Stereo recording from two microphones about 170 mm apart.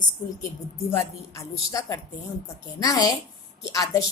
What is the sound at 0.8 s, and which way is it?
A woman's voice, 15° left (ahead or behind).